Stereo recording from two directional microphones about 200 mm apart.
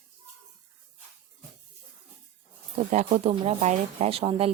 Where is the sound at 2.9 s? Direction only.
35° right (ahead or behind).